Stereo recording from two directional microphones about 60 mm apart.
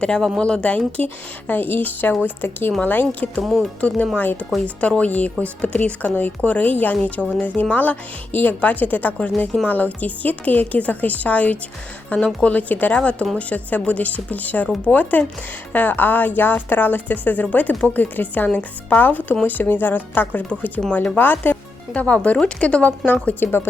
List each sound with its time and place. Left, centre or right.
0.3 s speech: centre
1.5 s speech: left
3.4 s speech: centre
3.8 s speech: left